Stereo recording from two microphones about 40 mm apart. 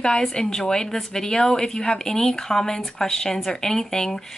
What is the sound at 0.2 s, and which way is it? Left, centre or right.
Speech, centre.